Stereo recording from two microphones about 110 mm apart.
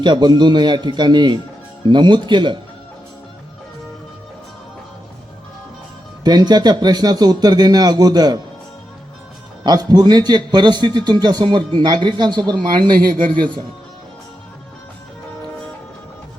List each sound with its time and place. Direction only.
0.0 s speech: 45° right (ahead or behind)
6.2 s a man's voice: 40° right (ahead or behind)
9.6 s a man's voice: 40° right (ahead or behind)